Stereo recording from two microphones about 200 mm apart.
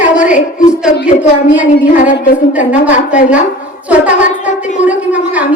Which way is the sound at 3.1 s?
5° right (ahead or behind).